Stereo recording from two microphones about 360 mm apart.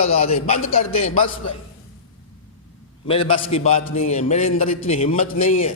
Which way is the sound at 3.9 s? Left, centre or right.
Centre.